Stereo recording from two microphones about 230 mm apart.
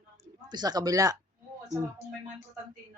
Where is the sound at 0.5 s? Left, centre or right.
Centre.